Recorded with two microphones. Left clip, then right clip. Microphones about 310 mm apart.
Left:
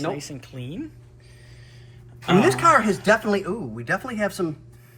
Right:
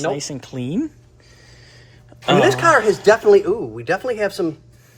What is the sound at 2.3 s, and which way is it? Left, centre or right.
Speech, right.